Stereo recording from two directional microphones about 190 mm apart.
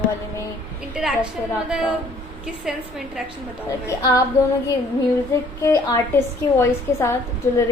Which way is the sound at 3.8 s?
20° left (ahead or behind).